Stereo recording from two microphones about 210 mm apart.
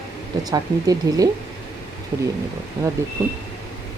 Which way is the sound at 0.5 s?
15° right (ahead or behind).